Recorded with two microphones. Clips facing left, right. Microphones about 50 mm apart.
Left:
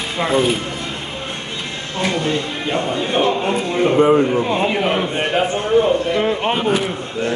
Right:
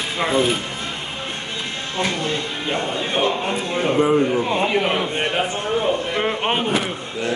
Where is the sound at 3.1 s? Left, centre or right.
Centre.